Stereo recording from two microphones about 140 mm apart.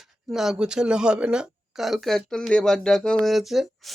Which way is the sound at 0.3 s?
Centre (ahead or behind).